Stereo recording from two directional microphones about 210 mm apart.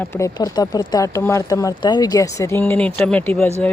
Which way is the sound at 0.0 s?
15° left (ahead or behind).